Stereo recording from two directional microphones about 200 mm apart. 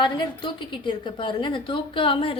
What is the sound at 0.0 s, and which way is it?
A woman's voice, 25° left (ahead or behind).